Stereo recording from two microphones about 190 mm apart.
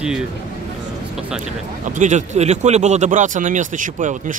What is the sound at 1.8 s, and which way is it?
Speech, 40° right (ahead or behind).